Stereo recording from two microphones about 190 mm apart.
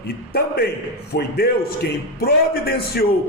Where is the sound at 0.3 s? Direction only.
55° left (ahead or behind).